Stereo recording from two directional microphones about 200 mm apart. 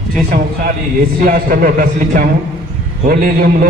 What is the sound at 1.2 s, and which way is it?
A man's voice, 45° right (ahead or behind).